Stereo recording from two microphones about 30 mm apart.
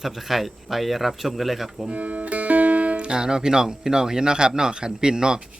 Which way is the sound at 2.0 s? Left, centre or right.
Right.